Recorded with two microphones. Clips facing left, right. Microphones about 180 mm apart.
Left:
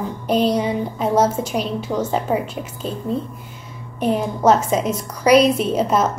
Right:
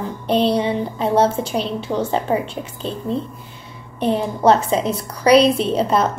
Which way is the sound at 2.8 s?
30° right (ahead or behind).